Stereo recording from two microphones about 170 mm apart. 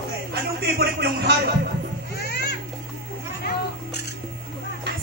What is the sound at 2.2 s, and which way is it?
Music, 70° left (ahead or behind).